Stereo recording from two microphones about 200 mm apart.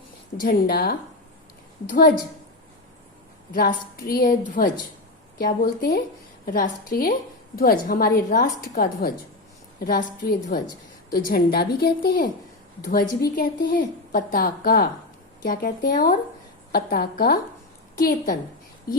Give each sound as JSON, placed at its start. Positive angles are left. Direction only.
{"t": 0.4, "sound": "a woman's voice", "side_deg": 50}
{"t": 4.0, "sound": "a woman's voice", "side_deg": 50}
{"t": 13.3, "sound": "a woman's voice", "side_deg": 45}